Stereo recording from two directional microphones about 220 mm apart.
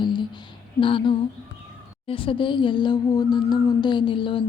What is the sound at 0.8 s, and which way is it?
A woman's voice, 25° left (ahead or behind).